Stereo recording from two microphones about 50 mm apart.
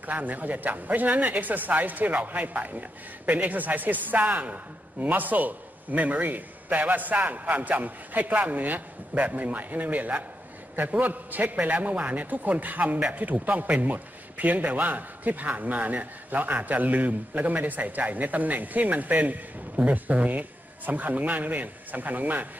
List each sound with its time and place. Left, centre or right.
0.0 s a man's voice: right